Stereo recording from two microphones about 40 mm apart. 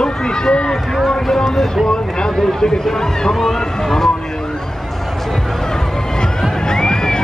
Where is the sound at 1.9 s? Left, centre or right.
Left.